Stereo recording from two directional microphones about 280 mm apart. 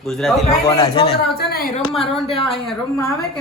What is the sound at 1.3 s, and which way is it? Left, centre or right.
Speech, left.